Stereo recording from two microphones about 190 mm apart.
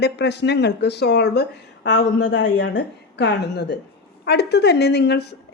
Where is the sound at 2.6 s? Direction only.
65° left (ahead or behind).